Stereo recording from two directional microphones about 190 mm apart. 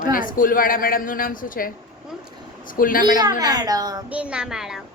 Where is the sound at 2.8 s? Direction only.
45° left (ahead or behind).